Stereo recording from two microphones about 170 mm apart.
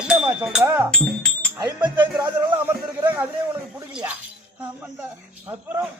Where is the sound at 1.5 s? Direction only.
25° right (ahead or behind).